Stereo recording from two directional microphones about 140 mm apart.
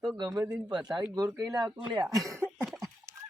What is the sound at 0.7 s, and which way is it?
Speech, 30° right (ahead or behind).